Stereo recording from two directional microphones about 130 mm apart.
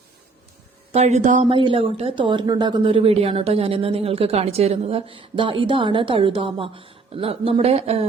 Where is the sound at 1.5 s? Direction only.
40° right (ahead or behind).